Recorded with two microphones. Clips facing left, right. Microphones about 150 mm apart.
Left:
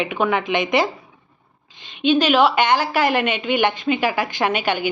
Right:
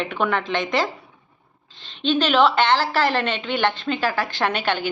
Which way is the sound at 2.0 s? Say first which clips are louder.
Left 2 dB; 10° left (ahead or behind).